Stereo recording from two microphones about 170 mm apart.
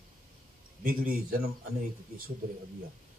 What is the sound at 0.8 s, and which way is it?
Speech, 55° right (ahead or behind).